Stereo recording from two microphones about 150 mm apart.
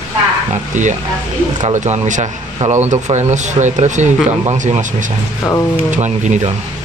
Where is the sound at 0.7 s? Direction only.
55° right (ahead or behind).